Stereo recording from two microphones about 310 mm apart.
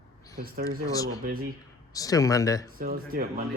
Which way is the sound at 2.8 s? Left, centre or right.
Right.